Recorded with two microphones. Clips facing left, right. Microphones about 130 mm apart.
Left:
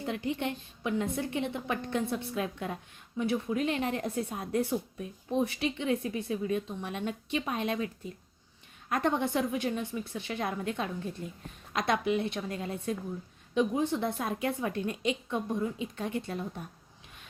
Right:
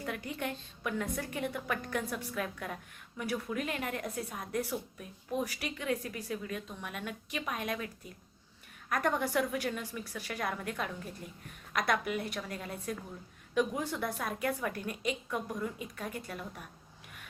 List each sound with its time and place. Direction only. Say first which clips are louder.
0.0 s a woman's voice: left 5 dB; 25° left (ahead or behind)